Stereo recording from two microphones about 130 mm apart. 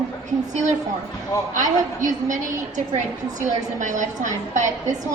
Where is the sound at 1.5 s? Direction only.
75° right (ahead or behind).